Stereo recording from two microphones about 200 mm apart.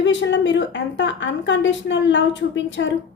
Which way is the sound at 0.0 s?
65° left (ahead or behind).